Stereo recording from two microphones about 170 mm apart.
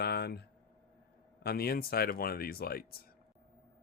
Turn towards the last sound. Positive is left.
turn(degrees=60)  # may be behind; listen again after turning